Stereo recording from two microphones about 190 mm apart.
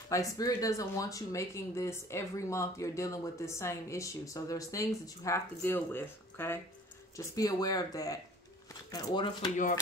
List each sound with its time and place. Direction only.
0.1 s speech: 15° left (ahead or behind)